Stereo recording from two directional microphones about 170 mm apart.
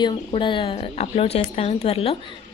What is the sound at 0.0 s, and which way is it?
Speech, 30° left (ahead or behind).